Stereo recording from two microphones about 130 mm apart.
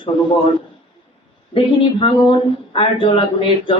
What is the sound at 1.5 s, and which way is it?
Speech, 40° left (ahead or behind).